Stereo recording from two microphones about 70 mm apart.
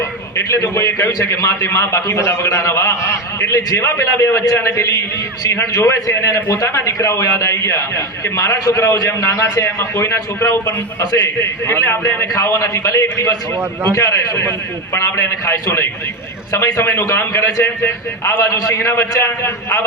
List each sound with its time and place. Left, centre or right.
0.7 s a man's voice: left
11.0 s a man's voice: left
11.6 s a man's voice: left
12.3 s a man's voice: left
14.9 s a man's voice: left
18.4 s a man's voice: left